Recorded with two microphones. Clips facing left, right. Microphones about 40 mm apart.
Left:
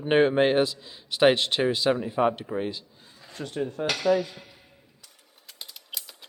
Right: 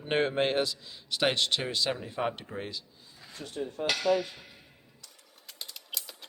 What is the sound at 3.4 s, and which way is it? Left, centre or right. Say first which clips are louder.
Cutlery: left 7 dB; left.